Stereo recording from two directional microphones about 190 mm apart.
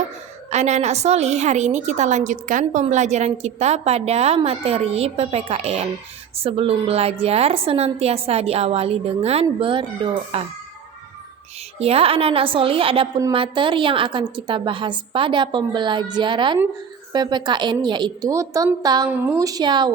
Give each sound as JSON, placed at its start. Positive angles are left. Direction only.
{"t": 0.5, "sound": "a woman's voice", "side_deg": -35}
{"t": 11.8, "sound": "a woman's voice", "side_deg": -30}